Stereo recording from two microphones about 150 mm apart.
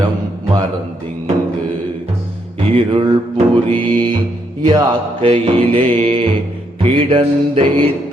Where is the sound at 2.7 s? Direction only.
35° right (ahead or behind).